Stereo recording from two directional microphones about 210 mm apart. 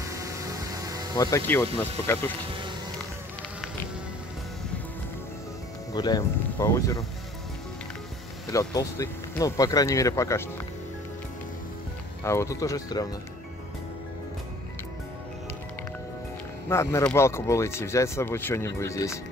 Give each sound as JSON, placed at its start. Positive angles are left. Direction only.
{"t": 0.0, "sound": "vehicle", "side_deg": -15}
{"t": 1.1, "sound": "speech", "side_deg": 15}
{"t": 5.9, "sound": "speech", "side_deg": 20}
{"t": 8.5, "sound": "speech", "side_deg": 15}
{"t": 12.2, "sound": "speech", "side_deg": 15}
{"t": 16.6, "sound": "speech", "side_deg": 15}